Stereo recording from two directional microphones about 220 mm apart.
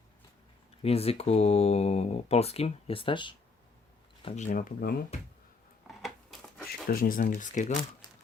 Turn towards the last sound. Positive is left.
turn(degrees=35)  # may be behind; listen again after turning